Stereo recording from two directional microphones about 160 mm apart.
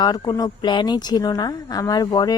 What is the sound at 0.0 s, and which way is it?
Speech, 25° left (ahead or behind).